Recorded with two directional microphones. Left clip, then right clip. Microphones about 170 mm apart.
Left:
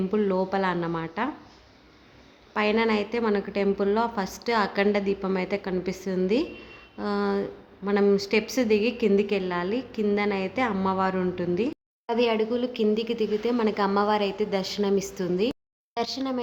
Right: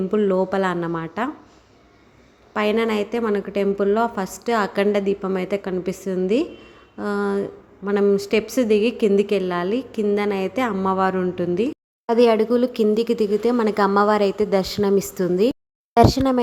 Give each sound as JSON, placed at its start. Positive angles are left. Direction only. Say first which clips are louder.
{"t": 0.1, "sound": "a woman's voice", "louder": "right 6 dB", "side_deg": -20}
{"t": 2.5, "sound": "a woman's voice", "louder": "right 3 dB", "side_deg": -25}
{"t": 16.0, "sound": "speech", "louder": "right 13 dB", "side_deg": -50}